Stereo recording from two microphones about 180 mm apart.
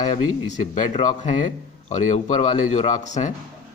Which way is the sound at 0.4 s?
40° left (ahead or behind).